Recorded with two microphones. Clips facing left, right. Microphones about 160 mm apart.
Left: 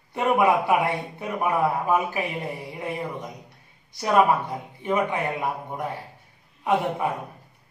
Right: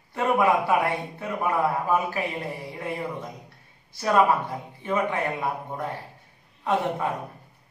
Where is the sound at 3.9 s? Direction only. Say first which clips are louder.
Left 1 dB; 15° left (ahead or behind).